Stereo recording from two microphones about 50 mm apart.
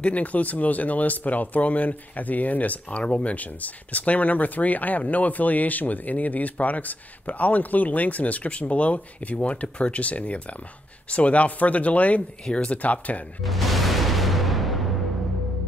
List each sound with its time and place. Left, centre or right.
0.0 s speech: left
12.4 s speech: centre
12.7 s speech: left
13.4 s music: centre